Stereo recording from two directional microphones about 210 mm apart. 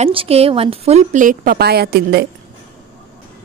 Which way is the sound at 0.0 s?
25° right (ahead or behind).